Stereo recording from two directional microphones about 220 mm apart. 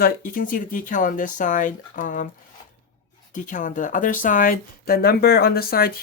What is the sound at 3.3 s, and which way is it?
Speech, 35° left (ahead or behind).